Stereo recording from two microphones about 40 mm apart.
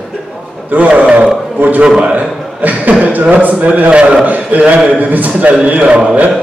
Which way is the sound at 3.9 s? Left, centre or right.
Right.